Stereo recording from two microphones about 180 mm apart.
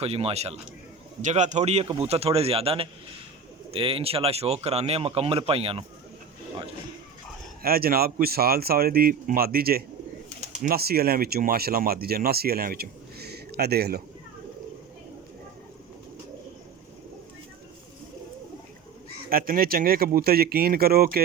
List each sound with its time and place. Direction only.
0.0 s speech: 35° right (ahead or behind)
7.6 s speech: 55° right (ahead or behind)
19.3 s speech: 55° right (ahead or behind)